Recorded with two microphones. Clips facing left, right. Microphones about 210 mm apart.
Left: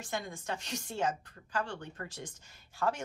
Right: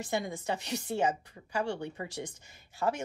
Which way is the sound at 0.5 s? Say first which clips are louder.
Right 4 dB; 65° right (ahead or behind).